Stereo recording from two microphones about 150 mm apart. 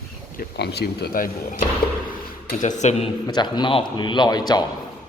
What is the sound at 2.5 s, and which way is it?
Speech, 55° left (ahead or behind).